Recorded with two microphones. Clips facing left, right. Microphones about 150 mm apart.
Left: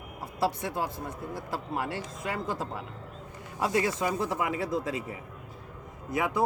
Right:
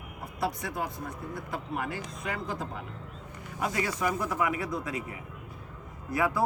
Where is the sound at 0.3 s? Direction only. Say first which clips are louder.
Left 3 dB; 30° left (ahead or behind).